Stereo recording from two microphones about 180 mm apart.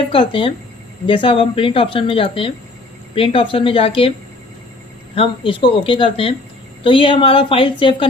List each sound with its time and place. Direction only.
0.1 s speech: 30° left (ahead or behind)
5.1 s speech: 30° left (ahead or behind)